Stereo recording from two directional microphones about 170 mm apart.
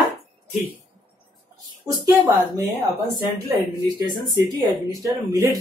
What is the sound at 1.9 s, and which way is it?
Speech, 20° right (ahead or behind).